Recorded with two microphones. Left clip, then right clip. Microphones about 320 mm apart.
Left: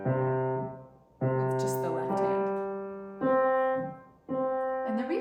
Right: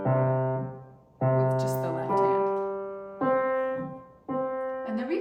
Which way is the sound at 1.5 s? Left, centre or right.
Centre.